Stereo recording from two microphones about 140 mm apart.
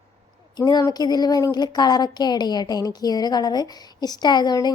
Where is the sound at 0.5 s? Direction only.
30° left (ahead or behind).